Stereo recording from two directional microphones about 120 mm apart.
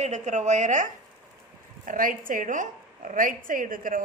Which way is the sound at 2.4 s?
90° right.